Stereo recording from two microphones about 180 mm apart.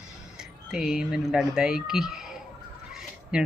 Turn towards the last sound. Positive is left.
turn(degrees=-5)  # may be behind; listen again after turning